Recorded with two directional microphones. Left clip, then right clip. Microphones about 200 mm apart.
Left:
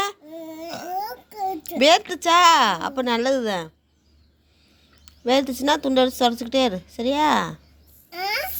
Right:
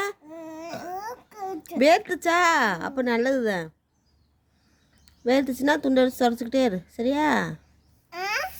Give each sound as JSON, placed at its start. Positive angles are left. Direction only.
{"t": 0.3, "sound": "a sound", "side_deg": -15}
{"t": 0.7, "sound": "babbling", "side_deg": -30}
{"t": 0.9, "sound": "a sound", "side_deg": -15}
{"t": 1.8, "sound": "a woman's voice", "side_deg": -25}
{"t": 5.2, "sound": "a woman's voice", "side_deg": -25}
{"t": 8.1, "sound": "babbling", "side_deg": -15}